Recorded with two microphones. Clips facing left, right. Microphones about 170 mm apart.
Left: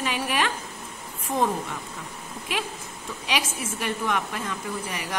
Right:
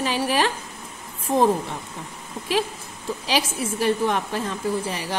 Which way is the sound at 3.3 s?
35° right (ahead or behind).